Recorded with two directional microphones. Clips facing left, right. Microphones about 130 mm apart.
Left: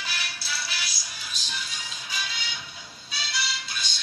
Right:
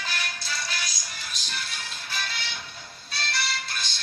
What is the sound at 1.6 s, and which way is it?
Music, 60° right (ahead or behind).